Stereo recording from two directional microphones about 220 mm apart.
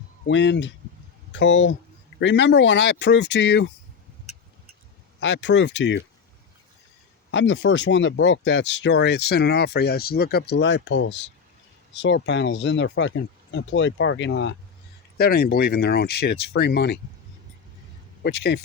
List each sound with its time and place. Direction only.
0.3 s speech: 55° left (ahead or behind)
5.2 s speech: 55° left (ahead or behind)
7.3 s speech: 55° left (ahead or behind)
15.2 s speech: 45° left (ahead or behind)
18.2 s speech: 50° left (ahead or behind)